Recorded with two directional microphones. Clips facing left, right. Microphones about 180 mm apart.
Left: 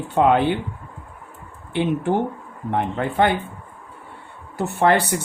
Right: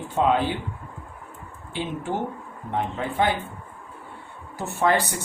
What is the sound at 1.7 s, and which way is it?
Speech, 60° left (ahead or behind).